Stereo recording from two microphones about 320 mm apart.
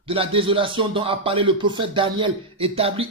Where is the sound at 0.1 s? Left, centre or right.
Centre.